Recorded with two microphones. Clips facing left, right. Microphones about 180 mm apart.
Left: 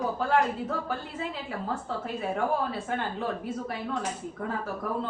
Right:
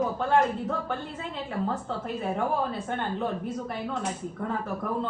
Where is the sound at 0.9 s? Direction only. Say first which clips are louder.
Even; 5° left (ahead or behind).